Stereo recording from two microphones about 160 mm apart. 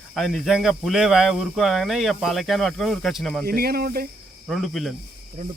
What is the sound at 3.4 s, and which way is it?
Speech, 70° right (ahead or behind).